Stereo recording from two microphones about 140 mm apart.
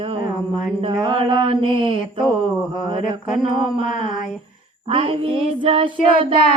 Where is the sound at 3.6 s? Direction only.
40° right (ahead or behind).